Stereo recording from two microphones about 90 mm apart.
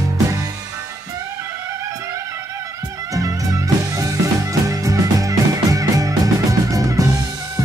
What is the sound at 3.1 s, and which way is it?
Music, 40° right (ahead or behind).